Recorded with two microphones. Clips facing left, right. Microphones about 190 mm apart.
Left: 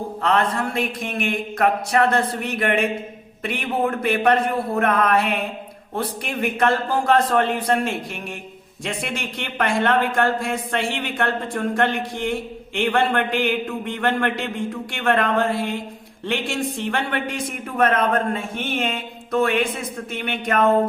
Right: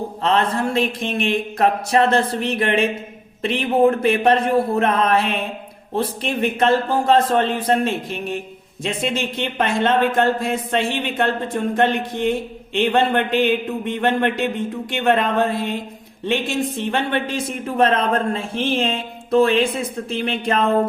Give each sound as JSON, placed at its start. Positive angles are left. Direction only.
{"t": 0.2, "sound": "speech", "side_deg": -25}